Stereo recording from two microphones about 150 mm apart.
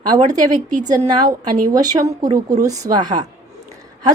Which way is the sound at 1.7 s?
25° right (ahead or behind).